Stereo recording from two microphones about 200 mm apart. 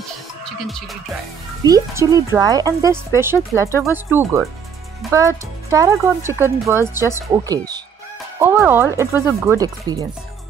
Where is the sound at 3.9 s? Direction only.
10° right (ahead or behind).